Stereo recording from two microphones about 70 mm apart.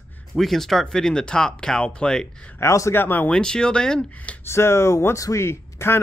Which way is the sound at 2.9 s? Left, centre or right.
Left.